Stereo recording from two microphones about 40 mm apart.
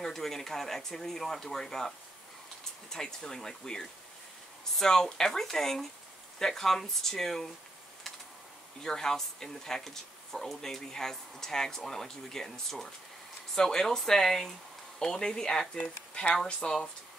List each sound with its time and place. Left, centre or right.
0.0 s speech: centre
8.8 s speech: centre